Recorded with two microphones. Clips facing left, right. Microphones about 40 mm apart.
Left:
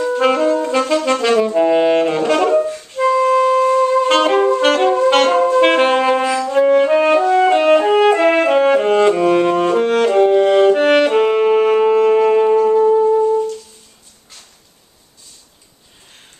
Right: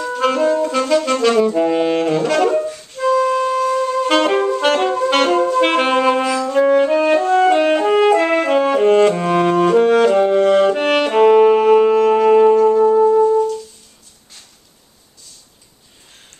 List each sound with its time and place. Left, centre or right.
0.0 s saxophone: centre
6.9 s french horn: centre
7.4 s music: centre
8.3 s brass instrument: centre
13.0 s music: centre